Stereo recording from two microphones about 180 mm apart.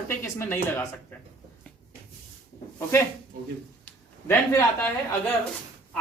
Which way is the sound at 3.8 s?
10° left (ahead or behind).